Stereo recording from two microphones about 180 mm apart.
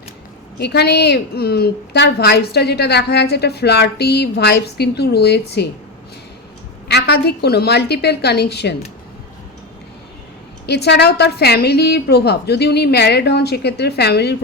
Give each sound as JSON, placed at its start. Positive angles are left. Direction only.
{"t": 0.6, "sound": "a woman's voice", "side_deg": 65}
{"t": 6.8, "sound": "a woman's voice", "side_deg": 65}
{"t": 10.7, "sound": "a woman's voice", "side_deg": 70}